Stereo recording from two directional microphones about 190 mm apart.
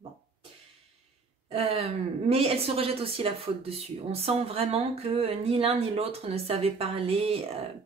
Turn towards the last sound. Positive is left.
turn(degrees=-30)  # may be behind; listen again after turning